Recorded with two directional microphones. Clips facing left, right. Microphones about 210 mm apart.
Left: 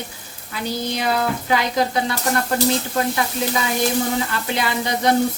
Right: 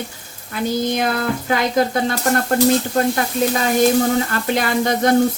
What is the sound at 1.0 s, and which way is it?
Speech, 50° right (ahead or behind).